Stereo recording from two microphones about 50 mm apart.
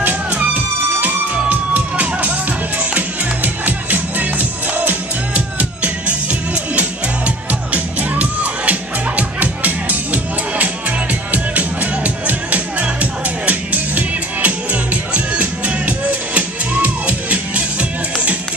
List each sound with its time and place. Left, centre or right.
1.0 s music: right
3.6 s music: right
7.7 s music: right